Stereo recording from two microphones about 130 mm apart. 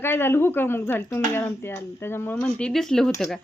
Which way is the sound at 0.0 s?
15° left (ahead or behind).